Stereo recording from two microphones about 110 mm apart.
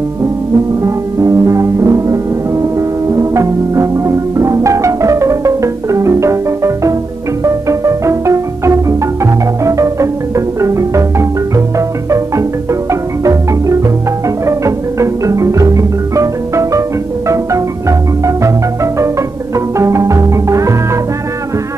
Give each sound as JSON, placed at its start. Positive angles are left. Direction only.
{"t": 0.8, "sound": "music", "side_deg": -25}
{"t": 13.2, "sound": "marimba", "side_deg": -30}
{"t": 14.4, "sound": "music", "side_deg": -25}
{"t": 19.5, "sound": "music", "side_deg": -25}